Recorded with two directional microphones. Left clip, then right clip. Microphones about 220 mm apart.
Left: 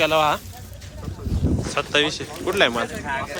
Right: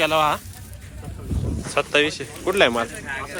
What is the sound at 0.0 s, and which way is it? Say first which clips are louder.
Speech: left 1 dB; 10° left (ahead or behind).